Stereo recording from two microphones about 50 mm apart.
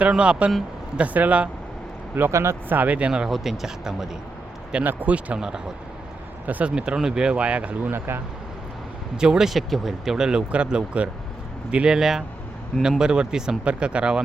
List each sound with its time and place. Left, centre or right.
0.1 s speech: right
2.3 s speech: right
2.6 s speech: right
3.2 s speech: centre
4.8 s speech: right
6.4 s speech: right
6.7 s speech: centre
7.9 s speech: right
9.1 s speech: centre
11.9 s speech: centre